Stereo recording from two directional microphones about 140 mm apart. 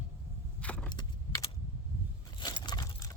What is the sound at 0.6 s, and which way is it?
Vehicle, 10° left (ahead or behind).